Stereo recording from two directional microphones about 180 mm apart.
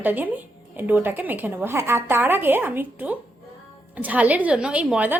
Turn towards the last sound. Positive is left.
turn(degrees=-10)  # may be behind; listen again after turning